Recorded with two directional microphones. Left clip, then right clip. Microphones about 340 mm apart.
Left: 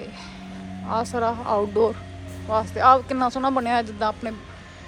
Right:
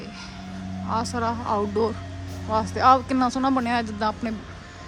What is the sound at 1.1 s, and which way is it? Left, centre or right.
Speech, centre.